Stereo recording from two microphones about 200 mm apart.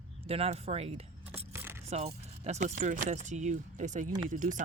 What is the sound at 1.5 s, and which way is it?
Scrape, 10° right (ahead or behind).